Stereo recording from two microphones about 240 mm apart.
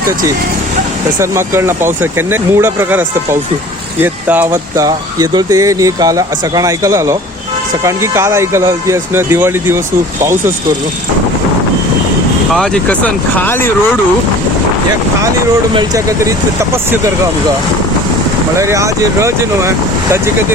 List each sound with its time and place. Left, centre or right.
1.2 s speech: centre
12.5 s speech: centre
15.7 s speech: centre
18.5 s speech: centre